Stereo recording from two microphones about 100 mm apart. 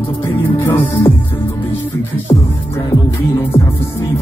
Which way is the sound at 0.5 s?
20° left (ahead or behind).